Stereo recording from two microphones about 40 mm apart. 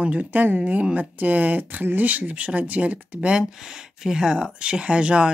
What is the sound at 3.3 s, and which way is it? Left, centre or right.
Speech, centre.